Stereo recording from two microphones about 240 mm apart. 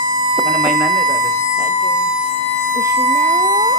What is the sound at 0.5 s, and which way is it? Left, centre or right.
Speech, centre.